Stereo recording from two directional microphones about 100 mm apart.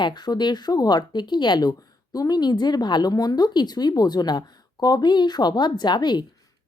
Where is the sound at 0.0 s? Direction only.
45° left (ahead or behind).